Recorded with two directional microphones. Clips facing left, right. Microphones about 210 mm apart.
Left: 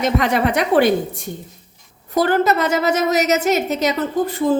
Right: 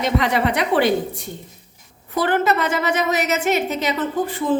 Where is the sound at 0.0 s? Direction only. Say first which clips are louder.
Left 2 dB; 45° left (ahead or behind).